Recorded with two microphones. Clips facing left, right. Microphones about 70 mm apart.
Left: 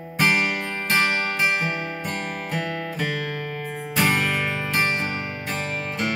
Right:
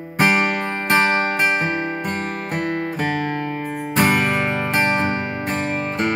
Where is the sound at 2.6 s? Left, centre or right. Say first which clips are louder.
Right 5 dB; right.